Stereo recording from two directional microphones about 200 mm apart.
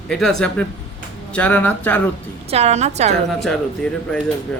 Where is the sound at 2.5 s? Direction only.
35° right (ahead or behind).